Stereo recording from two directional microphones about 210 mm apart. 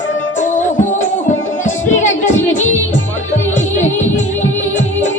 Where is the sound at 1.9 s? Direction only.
35° left (ahead or behind).